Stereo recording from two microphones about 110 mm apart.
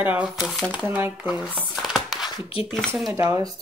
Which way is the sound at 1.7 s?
Centre (ahead or behind).